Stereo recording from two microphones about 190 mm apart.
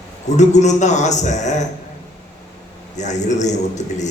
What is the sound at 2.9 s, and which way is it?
A man's voice, 40° left (ahead or behind).